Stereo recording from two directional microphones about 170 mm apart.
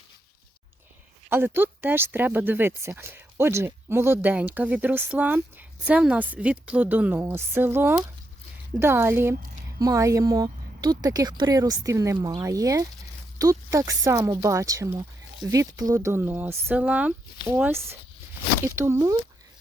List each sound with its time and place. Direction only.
1.3 s speech: 10° right (ahead or behind)